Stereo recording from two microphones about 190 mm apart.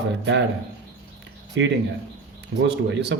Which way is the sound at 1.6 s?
75° right (ahead or behind).